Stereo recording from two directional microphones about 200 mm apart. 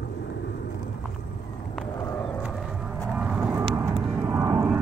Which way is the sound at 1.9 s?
15° left (ahead or behind).